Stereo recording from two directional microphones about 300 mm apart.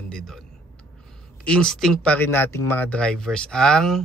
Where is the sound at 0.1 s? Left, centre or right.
Centre.